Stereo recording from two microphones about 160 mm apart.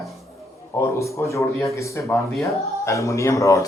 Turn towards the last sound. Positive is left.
turn(degrees=20)  # may be behind; listen again after turning